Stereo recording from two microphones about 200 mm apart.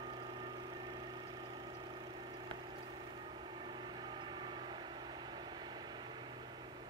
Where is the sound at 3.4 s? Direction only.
20° right (ahead or behind).